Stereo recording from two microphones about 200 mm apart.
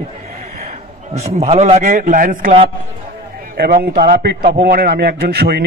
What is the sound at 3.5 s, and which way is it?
A man's voice, 50° right (ahead or behind).